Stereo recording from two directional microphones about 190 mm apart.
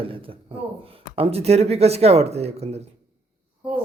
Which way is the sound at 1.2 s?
30° right (ahead or behind).